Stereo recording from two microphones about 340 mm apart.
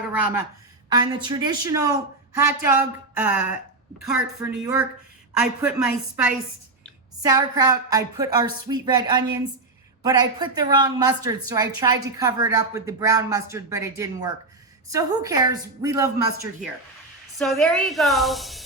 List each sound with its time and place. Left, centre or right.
0.9 s a woman's voice: centre
17.3 s a woman's voice: centre